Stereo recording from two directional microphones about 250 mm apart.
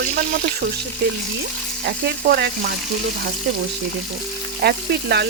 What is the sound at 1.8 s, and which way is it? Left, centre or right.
Speech, right.